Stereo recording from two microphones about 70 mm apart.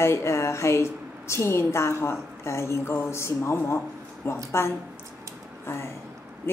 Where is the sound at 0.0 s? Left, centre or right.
Left.